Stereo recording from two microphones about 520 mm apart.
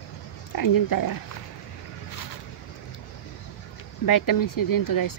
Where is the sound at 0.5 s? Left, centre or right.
Left.